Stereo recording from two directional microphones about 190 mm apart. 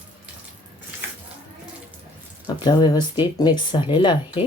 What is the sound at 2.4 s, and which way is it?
Speech, 25° left (ahead or behind).